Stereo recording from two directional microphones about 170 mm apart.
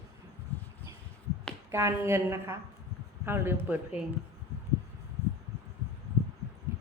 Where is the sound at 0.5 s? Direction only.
10° left (ahead or behind).